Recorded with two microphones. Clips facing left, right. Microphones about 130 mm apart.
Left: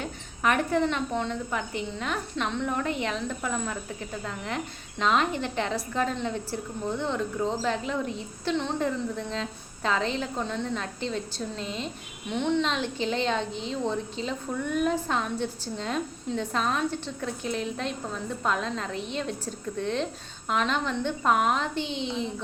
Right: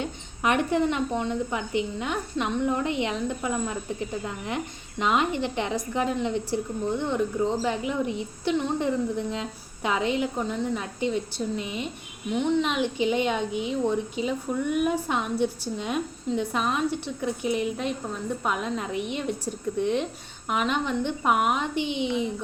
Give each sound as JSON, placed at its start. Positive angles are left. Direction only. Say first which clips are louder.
{"t": 0.0, "sound": "a woman's voice", "louder": "right 1 dB", "side_deg": -20}